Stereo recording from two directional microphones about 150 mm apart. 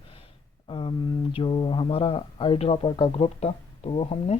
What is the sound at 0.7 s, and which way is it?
Speech, 35° left (ahead or behind).